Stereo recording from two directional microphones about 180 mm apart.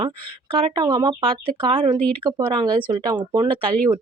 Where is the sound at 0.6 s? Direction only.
30° right (ahead or behind).